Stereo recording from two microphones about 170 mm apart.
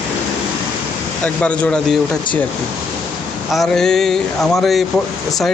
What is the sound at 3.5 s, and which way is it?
Speech, centre (ahead or behind).